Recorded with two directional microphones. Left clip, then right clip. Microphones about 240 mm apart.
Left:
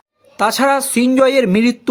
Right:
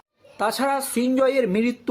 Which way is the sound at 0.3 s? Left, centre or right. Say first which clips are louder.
Left 9 dB; left.